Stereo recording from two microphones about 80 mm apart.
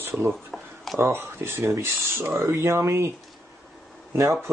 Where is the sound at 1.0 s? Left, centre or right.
Right.